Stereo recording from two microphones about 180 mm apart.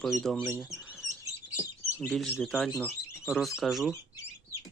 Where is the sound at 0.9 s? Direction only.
Centre (ahead or behind).